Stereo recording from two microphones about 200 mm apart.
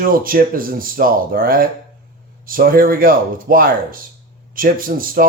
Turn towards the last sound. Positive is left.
turn(degrees=-45)  # may be behind; listen again after turning